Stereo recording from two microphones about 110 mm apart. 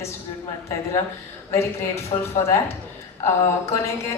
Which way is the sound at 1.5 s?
25° left (ahead or behind).